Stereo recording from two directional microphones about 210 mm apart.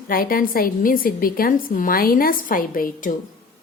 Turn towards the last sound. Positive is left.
turn(degrees=40)  # may be behind; listen again after turning